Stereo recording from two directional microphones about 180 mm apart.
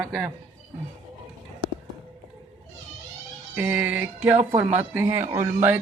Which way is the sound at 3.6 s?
10° right (ahead or behind).